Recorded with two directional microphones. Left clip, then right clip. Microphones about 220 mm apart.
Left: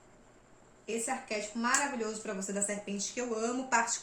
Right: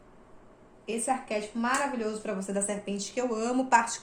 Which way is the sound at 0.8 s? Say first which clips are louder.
Right 5 dB; 25° right (ahead or behind).